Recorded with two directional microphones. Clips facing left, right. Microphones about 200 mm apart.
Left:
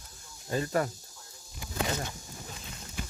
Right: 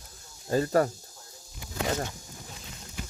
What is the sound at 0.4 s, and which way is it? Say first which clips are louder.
Speech: right 5 dB; 35° right (ahead or behind).